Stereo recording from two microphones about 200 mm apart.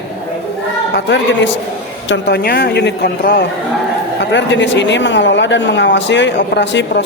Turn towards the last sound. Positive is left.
turn(degrees=60)  # may be behind; listen again after turning